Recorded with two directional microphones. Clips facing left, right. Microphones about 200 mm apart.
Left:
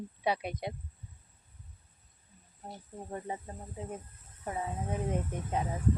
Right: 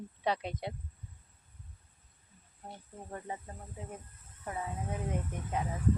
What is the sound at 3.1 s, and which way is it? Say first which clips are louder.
Speech: left 3 dB; 25° left (ahead or behind).